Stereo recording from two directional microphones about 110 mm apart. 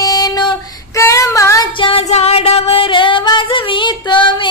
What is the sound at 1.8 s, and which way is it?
Music, 60° left (ahead or behind).